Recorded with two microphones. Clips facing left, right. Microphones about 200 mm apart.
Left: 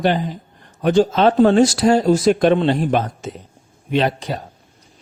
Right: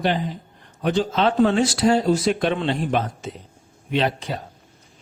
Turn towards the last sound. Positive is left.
turn(degrees=45)  # may be behind; listen again after turning